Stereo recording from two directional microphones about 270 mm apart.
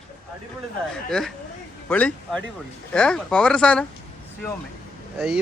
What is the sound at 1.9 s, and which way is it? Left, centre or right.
Speech, centre.